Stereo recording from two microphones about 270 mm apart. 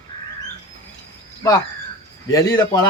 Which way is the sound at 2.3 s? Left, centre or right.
Centre.